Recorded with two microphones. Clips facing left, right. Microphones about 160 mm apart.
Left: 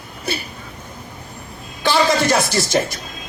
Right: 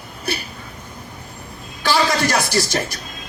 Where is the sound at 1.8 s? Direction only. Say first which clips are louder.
Left 2 dB; 25° left (ahead or behind).